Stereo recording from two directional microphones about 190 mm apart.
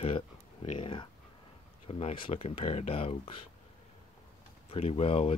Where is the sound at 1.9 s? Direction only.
30° left (ahead or behind).